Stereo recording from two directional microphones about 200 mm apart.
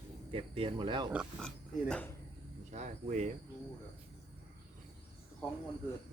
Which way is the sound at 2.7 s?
35° right (ahead or behind).